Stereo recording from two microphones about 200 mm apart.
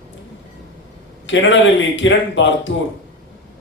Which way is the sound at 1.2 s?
70° left (ahead or behind).